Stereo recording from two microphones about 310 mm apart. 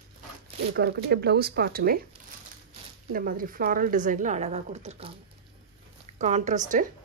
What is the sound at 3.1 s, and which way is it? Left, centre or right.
A woman's voice, right.